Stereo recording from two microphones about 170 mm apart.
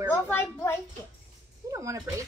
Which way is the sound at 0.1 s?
15° left (ahead or behind).